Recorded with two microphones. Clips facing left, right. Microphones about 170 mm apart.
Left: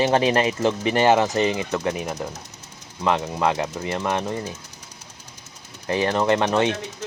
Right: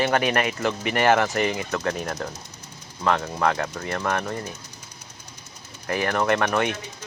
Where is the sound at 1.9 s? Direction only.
5° left (ahead or behind).